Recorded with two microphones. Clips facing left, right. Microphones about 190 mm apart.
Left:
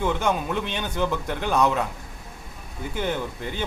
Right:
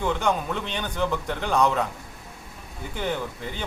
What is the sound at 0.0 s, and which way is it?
A man's voice, 10° left (ahead or behind).